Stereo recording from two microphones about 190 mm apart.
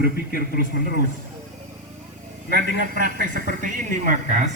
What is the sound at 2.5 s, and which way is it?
A man's voice, 45° right (ahead or behind).